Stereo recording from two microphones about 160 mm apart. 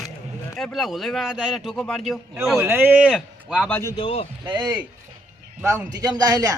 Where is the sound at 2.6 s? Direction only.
15° right (ahead or behind).